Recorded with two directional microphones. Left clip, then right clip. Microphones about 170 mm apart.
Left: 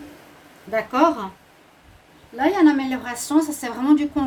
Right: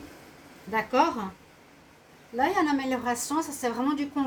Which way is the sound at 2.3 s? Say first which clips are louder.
Left 7 dB; 45° left (ahead or behind).